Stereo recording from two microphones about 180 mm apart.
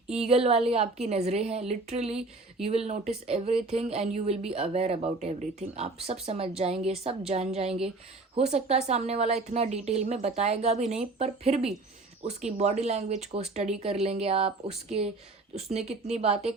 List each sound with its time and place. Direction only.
0.1 s speech: 35° right (ahead or behind)
16.1 s speech: 35° right (ahead or behind)